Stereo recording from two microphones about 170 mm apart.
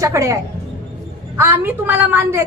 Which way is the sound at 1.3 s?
10° right (ahead or behind).